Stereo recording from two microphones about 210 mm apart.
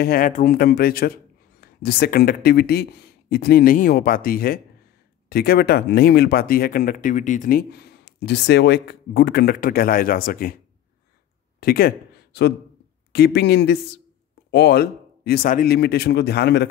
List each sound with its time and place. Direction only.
0.0 s speech: 45° left (ahead or behind)
11.6 s a man's voice: 45° left (ahead or behind)